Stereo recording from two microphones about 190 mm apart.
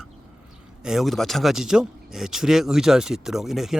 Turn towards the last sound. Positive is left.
turn(degrees=0)  # may be behind; listen again after turning